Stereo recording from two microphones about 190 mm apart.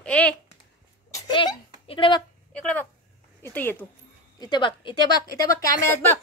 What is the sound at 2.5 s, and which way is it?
Speech, 5° left (ahead or behind).